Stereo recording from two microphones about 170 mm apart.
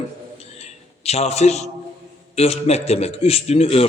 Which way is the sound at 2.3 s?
40° left (ahead or behind).